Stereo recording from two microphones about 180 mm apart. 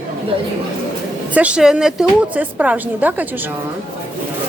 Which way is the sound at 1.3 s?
5° right (ahead or behind).